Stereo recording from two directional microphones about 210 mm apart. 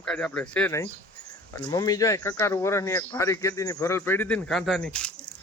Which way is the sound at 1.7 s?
15° left (ahead or behind).